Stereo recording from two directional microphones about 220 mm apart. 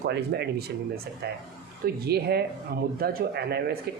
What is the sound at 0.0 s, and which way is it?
Speech, 50° right (ahead or behind).